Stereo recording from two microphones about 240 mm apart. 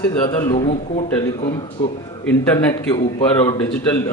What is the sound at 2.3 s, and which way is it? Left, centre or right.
Speech, centre.